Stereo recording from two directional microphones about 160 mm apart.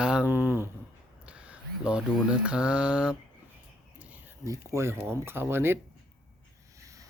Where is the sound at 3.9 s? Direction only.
10° right (ahead or behind).